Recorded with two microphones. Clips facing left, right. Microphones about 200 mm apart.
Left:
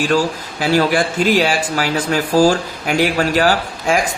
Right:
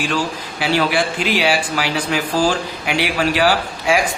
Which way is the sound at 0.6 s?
45° left (ahead or behind).